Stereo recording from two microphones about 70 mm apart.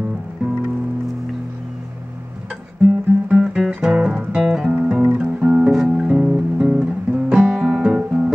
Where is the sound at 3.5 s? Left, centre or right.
Centre.